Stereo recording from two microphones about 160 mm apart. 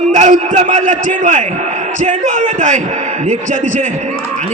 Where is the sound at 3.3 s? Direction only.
55° right (ahead or behind).